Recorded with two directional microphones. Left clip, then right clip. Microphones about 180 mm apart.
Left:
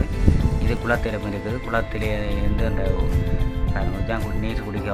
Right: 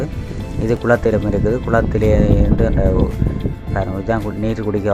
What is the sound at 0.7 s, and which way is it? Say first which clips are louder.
Speech: right 9 dB; 35° right (ahead or behind).